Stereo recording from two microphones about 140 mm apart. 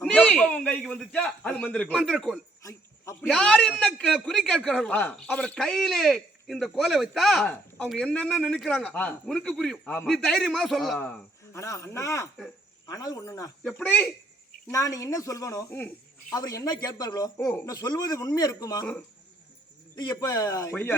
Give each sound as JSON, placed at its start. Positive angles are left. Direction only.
{"t": 0.0, "sound": "a man's voice", "side_deg": 5}
{"t": 11.5, "sound": "speech", "side_deg": 20}
{"t": 13.7, "sound": "a man's voice", "side_deg": 10}
{"t": 14.7, "sound": "speech", "side_deg": 25}
{"t": 20.0, "sound": "speech", "side_deg": 25}